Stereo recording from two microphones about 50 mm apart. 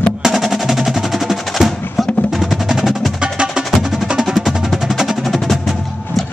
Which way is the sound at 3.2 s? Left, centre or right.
Centre.